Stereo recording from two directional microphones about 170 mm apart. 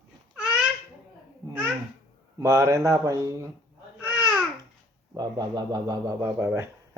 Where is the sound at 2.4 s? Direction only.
15° right (ahead or behind).